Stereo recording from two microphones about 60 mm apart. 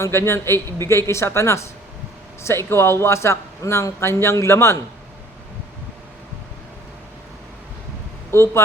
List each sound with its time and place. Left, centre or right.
0.0 s a man's voice: left
8.3 s speech: left